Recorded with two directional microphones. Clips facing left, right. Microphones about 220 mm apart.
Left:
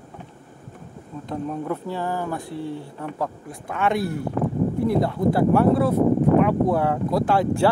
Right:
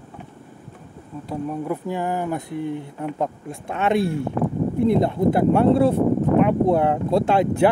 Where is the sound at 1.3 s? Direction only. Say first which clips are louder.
Right 1 dB; 10° right (ahead or behind).